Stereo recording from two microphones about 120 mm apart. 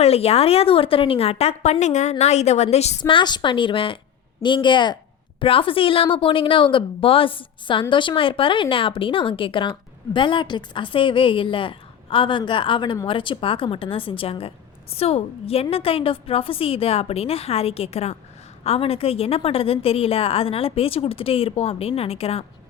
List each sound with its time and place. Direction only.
0.0 s a woman's voice: 60° left (ahead or behind)
3.0 s a woman's voice: 40° left (ahead or behind); by 22.4 s 55° left (ahead or behind)